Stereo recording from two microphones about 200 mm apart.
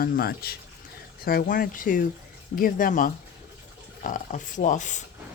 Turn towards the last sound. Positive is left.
turn(degrees=40)  # may be behind; listen again after turning